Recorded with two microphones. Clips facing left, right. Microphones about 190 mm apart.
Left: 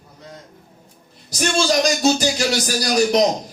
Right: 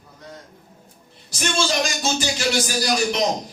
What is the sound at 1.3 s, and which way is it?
Speech, 40° left (ahead or behind).